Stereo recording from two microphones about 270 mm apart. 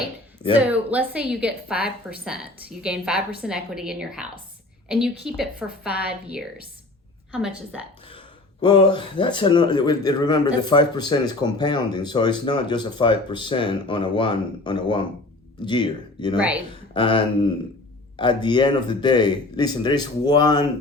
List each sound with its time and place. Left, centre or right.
0.6 s a woman's voice: centre
6.0 s a woman's voice: left
7.3 s a woman's voice: centre
8.6 s speech: centre